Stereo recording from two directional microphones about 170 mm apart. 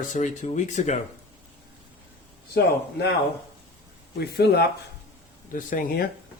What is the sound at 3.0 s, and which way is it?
Speech, 70° left (ahead or behind).